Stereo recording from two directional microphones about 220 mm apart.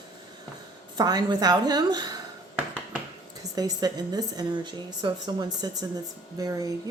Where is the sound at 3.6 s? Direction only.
15° right (ahead or behind).